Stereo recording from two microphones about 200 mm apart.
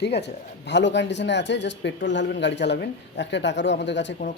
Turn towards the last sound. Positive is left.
turn(degrees=60)  # may be behind; listen again after turning